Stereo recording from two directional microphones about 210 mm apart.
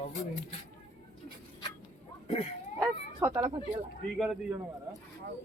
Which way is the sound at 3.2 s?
10° right (ahead or behind).